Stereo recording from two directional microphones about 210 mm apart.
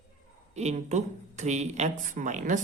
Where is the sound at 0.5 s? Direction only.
30° right (ahead or behind).